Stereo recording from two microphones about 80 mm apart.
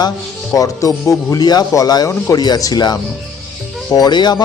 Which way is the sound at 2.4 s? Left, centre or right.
Left.